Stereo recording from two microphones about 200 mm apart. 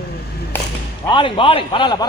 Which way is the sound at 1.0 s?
25° left (ahead or behind).